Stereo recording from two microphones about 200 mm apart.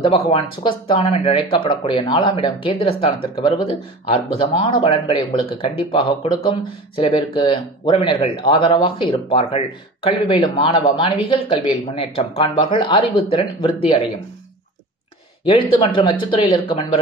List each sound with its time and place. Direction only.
0.0 s speech: 25° left (ahead or behind)
15.4 s speech: 25° left (ahead or behind)